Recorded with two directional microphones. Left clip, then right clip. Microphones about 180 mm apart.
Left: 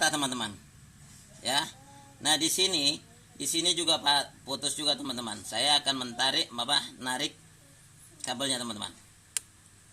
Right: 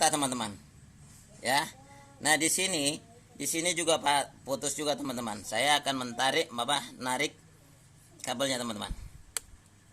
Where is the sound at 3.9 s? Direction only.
15° right (ahead or behind).